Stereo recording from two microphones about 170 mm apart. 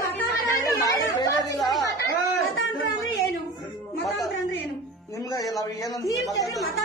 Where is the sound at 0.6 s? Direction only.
20° left (ahead or behind).